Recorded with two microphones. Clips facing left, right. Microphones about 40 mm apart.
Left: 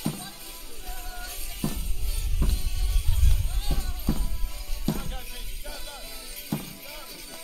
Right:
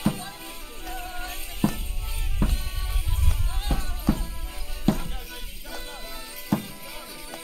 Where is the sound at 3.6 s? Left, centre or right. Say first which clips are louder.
Right 8 dB; right.